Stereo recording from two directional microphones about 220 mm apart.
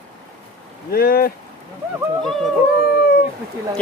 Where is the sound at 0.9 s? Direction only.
40° left (ahead or behind).